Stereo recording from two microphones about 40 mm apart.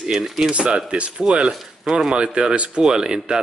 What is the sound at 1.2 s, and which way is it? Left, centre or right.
Speech, right.